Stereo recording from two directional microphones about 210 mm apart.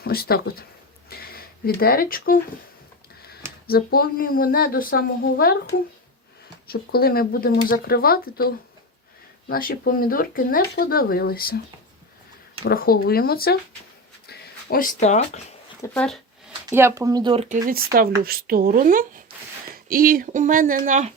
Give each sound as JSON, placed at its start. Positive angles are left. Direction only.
{"t": 0.0, "sound": "speech", "side_deg": 45}
{"t": 1.1, "sound": "a sound", "side_deg": 45}
{"t": 3.7, "sound": "speech", "side_deg": 45}
{"t": 6.7, "sound": "speech", "side_deg": 45}
{"t": 12.6, "sound": "speech", "side_deg": 45}
{"t": 15.8, "sound": "speech", "side_deg": 5}
{"t": 16.5, "sound": "speech", "side_deg": -15}
{"t": 17.7, "sound": "speech", "side_deg": -45}